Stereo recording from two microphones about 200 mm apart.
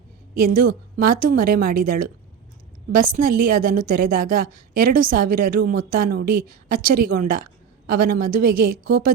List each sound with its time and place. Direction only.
0.3 s a woman's voice: 45° right (ahead or behind)